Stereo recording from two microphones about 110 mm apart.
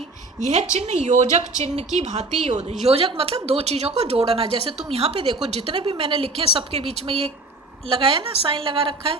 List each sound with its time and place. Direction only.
0.3 s a woman's voice: 90° right
2.8 s a woman's voice: 60° right (ahead or behind)